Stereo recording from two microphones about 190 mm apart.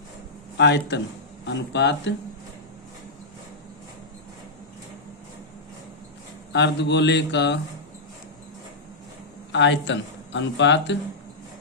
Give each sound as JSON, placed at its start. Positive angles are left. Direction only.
{"t": 0.5, "sound": "a man's voice", "side_deg": 65}
{"t": 6.5, "sound": "a man's voice", "side_deg": 65}
{"t": 9.5, "sound": "a man's voice", "side_deg": 70}